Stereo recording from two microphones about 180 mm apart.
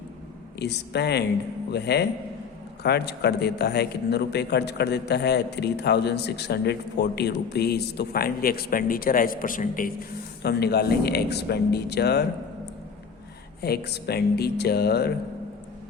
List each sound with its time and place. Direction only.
0.6 s a man's voice: 70° left (ahead or behind); by 9.9 s 50° left (ahead or behind)
10.4 s a man's voice: 65° left (ahead or behind)
13.6 s a man's voice: 65° left (ahead or behind)